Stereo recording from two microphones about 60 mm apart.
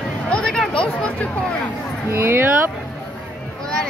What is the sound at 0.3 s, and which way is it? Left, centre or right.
Chatter, centre.